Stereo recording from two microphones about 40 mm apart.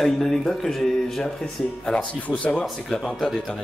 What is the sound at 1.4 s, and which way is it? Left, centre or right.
Speech, left.